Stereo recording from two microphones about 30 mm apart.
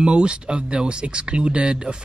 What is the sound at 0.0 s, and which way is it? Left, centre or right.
Speech, right.